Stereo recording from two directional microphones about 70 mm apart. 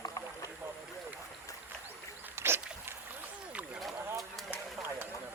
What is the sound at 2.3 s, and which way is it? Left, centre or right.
Boat, right.